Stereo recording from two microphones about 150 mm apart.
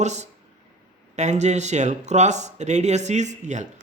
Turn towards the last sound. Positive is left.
turn(degrees=-50)  # may be behind; listen again after turning